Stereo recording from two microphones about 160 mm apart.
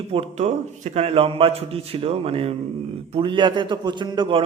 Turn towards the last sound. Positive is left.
turn(degrees=-30)  # may be behind; listen again after turning